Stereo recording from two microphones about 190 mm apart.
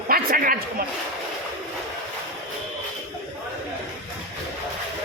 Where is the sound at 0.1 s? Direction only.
50° right (ahead or behind).